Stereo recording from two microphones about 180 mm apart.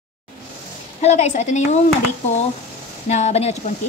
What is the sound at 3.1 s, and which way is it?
Speech, 35° left (ahead or behind).